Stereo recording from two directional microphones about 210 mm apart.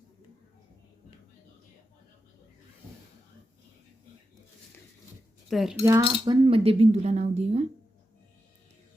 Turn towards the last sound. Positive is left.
turn(degrees=-30)  # may be behind; listen again after turning